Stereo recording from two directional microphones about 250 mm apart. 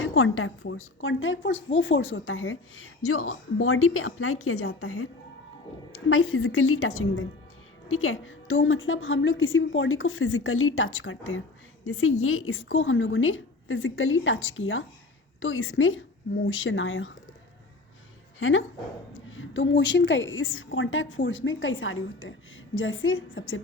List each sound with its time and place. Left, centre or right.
0.0 s a woman's voice: left
6.1 s a woman's voice: left
18.3 s a woman's voice: left